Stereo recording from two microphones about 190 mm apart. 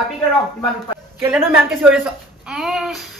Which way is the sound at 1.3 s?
5° right (ahead or behind).